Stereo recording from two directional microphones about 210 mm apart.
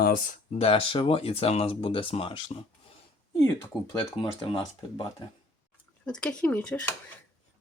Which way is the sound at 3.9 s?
25° left (ahead or behind).